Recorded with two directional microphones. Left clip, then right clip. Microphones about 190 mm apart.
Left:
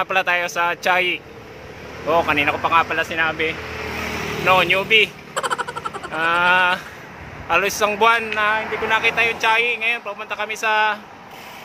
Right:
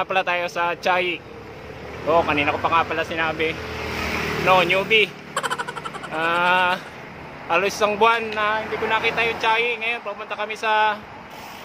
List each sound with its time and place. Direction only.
0.0 s speech: 10° left (ahead or behind)
3.7 s vehicle: 35° left (ahead or behind); by 5.1 s 10° left (ahead or behind)
5.3 s a sound: centre (ahead or behind)
6.1 s speech: 10° left (ahead or behind)